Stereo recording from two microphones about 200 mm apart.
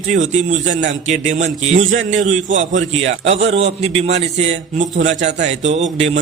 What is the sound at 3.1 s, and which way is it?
A man's voice, 30° right (ahead or behind).